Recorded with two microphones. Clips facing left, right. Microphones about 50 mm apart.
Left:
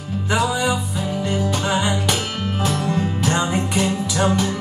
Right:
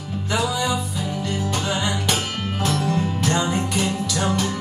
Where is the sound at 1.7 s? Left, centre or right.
Centre.